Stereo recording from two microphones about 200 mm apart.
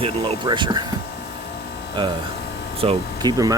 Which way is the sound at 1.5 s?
55° left (ahead or behind).